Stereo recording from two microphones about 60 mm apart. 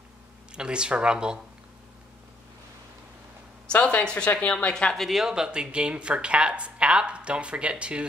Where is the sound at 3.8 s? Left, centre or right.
Centre.